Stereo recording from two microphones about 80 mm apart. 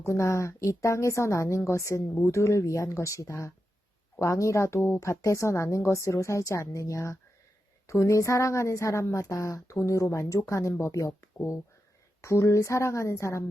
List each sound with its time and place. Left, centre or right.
0.0 s a woman's voice: left